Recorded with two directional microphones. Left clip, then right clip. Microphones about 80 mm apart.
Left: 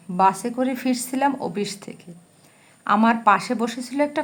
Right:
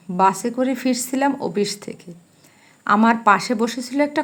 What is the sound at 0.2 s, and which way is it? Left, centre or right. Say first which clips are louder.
A woman's voice: right 1 dB; right.